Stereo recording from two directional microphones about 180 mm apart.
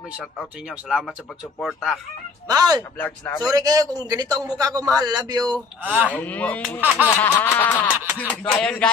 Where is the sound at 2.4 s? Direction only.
20° right (ahead or behind).